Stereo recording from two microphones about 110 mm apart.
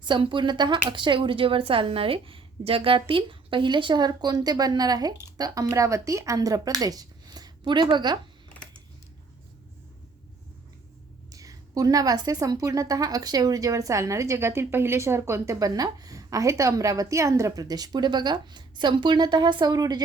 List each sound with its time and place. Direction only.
0.0 s a woman's voice: 45° right (ahead or behind)
11.3 s a woman's voice: 30° right (ahead or behind)